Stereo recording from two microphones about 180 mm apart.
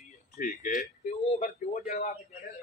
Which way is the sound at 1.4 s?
55° left (ahead or behind).